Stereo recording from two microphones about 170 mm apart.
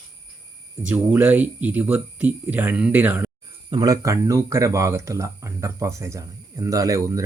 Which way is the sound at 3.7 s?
25° right (ahead or behind).